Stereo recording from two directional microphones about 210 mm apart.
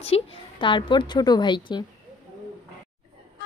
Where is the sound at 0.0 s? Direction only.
25° left (ahead or behind).